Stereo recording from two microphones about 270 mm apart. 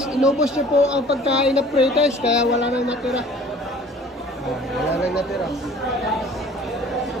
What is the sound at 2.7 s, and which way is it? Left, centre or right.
Speech, centre.